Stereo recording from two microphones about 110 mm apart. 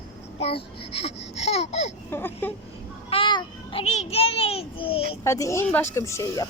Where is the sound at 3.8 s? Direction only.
80° left; by 5.0 s 55° left (ahead or behind).